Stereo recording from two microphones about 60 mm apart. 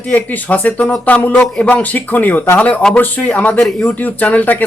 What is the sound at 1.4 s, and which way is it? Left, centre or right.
Speech, centre.